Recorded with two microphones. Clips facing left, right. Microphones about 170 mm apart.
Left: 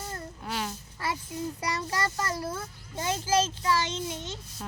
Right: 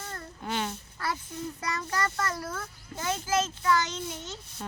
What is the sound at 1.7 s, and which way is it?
A child's voice, 25° left (ahead or behind).